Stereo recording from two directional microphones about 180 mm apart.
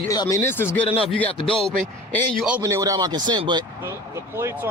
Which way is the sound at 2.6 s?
15° right (ahead or behind).